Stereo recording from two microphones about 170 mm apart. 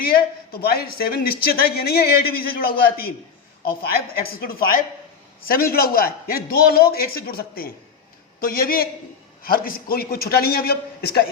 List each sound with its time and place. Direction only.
0.5 s speech: 65° left (ahead or behind)